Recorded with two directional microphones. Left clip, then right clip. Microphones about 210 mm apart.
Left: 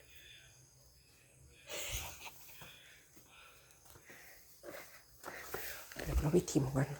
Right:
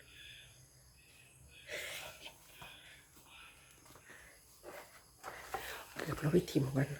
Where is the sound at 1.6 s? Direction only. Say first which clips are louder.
Even; 5° left (ahead or behind).